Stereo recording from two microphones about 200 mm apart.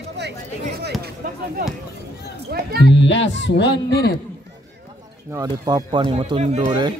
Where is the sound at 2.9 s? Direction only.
65° left (ahead or behind).